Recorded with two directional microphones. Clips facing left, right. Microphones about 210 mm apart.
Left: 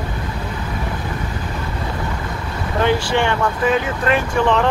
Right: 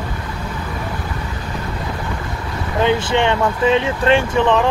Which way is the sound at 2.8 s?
20° right (ahead or behind).